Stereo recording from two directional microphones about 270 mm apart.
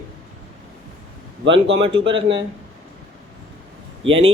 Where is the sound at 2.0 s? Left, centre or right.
Right.